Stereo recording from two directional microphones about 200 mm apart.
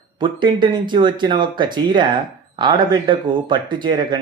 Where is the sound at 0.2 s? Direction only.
25° right (ahead or behind).